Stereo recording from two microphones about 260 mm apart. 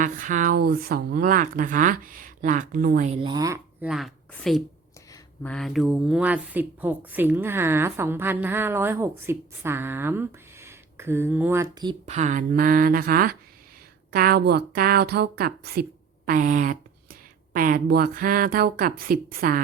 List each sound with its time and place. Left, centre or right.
0.0 s a woman's voice: right